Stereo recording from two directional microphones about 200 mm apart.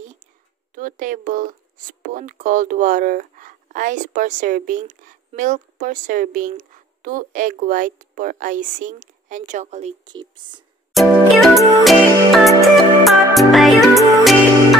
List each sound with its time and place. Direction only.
0.7 s speech: 40° right (ahead or behind)
10.0 s speech: 25° right (ahead or behind)
10.9 s music: centre (ahead or behind)